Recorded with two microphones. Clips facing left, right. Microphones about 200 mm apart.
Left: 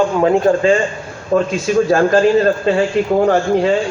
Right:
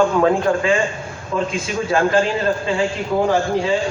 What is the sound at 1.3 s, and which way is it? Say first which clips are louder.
Speech: left 8 dB; 50° left (ahead or behind).